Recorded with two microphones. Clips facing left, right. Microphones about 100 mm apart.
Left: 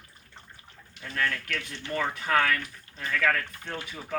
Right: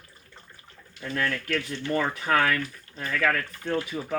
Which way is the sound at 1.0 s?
10° right (ahead or behind).